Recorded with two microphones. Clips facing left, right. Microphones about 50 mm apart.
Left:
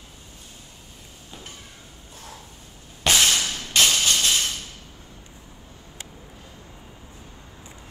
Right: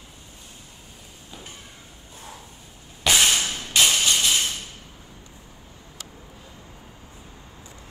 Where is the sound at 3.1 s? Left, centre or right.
Centre.